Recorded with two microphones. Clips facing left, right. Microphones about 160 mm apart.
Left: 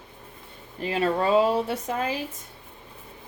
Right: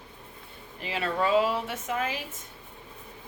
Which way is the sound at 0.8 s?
35° left (ahead or behind).